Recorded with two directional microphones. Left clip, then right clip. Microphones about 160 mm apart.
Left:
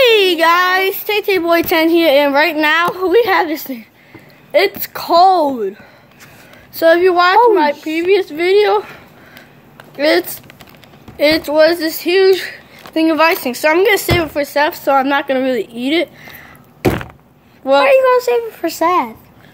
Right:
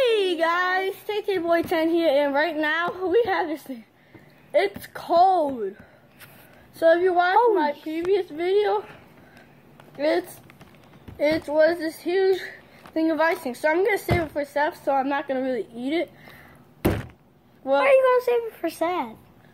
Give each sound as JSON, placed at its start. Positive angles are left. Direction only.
{"t": 0.0, "sound": "a woman's voice", "side_deg": 25}
{"t": 6.8, "sound": "speech", "side_deg": 25}
{"t": 9.9, "sound": "speech", "side_deg": 25}
{"t": 17.7, "sound": "a woman's voice", "side_deg": -10}